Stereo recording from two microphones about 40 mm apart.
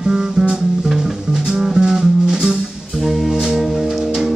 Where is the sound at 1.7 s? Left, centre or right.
Centre.